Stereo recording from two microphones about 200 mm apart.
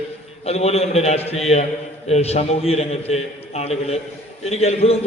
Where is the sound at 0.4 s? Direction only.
30° left (ahead or behind).